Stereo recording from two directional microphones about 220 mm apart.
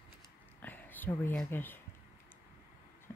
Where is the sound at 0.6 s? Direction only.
10° left (ahead or behind).